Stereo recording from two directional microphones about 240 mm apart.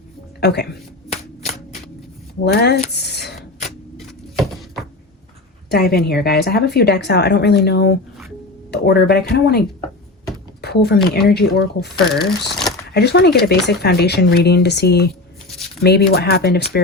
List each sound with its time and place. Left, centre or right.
0.3 s speech: left
1.1 s shuffling cards: left
2.4 s a woman's voice: left
2.9 s a sound: left
4.4 s a sound: centre
5.7 s a woman's voice: left
12.2 s speech: centre
12.9 s a woman's voice: left